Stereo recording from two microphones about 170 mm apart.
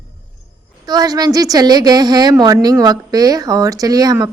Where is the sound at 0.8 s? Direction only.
25° right (ahead or behind).